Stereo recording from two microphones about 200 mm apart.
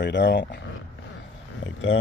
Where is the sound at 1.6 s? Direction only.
65° left (ahead or behind).